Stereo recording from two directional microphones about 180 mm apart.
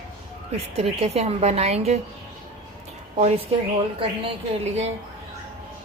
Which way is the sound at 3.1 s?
40° right (ahead or behind).